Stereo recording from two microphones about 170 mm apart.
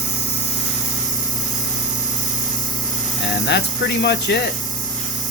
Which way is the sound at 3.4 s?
80° left.